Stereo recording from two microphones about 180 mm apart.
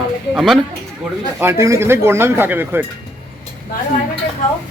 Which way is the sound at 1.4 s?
15° right (ahead or behind).